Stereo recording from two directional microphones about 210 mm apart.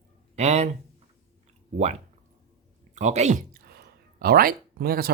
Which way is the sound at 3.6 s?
45° right (ahead or behind).